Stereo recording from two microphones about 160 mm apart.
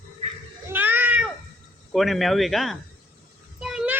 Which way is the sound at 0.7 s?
10° right (ahead or behind).